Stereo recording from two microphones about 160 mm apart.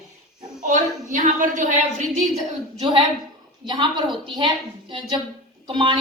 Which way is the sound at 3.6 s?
30° right (ahead or behind).